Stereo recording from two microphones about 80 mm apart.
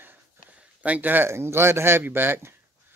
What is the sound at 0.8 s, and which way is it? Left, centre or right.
Speech, right.